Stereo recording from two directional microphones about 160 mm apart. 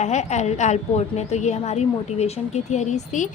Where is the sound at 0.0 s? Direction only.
45° left (ahead or behind).